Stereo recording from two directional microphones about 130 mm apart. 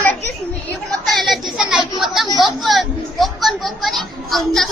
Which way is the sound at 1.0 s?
Centre (ahead or behind).